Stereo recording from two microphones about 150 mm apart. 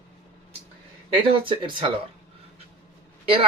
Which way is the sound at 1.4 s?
35° right (ahead or behind).